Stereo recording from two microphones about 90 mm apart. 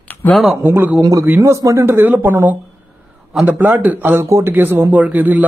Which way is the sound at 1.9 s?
20° right (ahead or behind).